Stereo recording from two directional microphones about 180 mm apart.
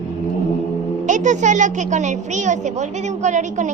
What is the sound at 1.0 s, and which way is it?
A woman's voice, 45° right (ahead or behind).